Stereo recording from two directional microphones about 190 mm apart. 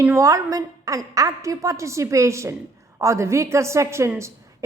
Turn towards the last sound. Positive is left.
turn(degrees=-15)  # may be behind; listen again after turning